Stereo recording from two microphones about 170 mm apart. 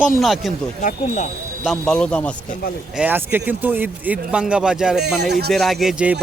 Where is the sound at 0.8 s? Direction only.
50° left (ahead or behind).